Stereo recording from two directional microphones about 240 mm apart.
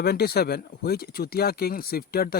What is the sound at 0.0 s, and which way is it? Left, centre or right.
Speech, left.